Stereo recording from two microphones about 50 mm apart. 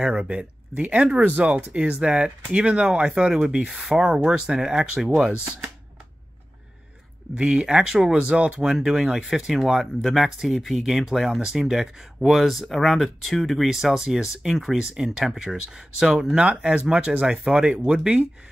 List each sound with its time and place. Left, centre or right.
0.0 s speech: centre
4.0 s speech: right
7.3 s speech: centre
16.3 s speech: right